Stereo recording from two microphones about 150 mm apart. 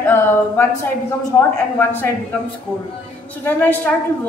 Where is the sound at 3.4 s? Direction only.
15° left (ahead or behind).